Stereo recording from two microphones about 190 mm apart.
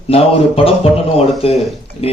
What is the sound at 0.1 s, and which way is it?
A man's voice, 30° left (ahead or behind).